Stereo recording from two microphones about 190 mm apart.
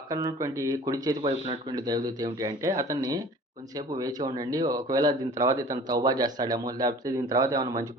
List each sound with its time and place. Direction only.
0.1 s speech: 20° right (ahead or behind)